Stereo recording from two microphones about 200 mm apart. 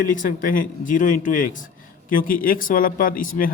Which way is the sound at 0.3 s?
45° left (ahead or behind).